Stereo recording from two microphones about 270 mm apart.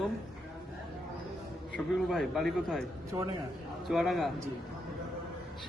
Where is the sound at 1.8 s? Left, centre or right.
Centre.